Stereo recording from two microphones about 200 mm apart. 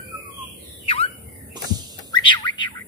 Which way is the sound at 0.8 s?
30° left (ahead or behind).